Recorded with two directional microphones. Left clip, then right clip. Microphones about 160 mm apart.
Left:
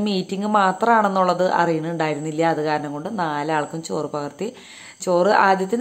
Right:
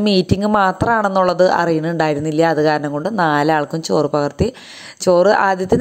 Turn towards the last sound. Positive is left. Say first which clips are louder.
# right 2 dB
turn(degrees=-40)  # may be behind; listen again after turning